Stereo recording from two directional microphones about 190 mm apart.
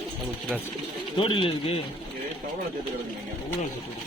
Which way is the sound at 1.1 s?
25° left (ahead or behind).